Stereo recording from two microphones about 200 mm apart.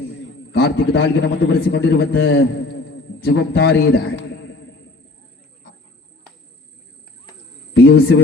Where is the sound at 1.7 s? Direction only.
60° left (ahead or behind).